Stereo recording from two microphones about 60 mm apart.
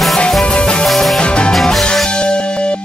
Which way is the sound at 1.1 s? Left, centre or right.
Centre.